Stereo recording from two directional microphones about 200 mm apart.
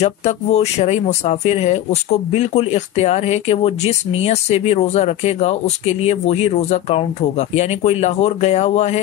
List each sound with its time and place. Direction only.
0.0 s speech: 35° left (ahead or behind)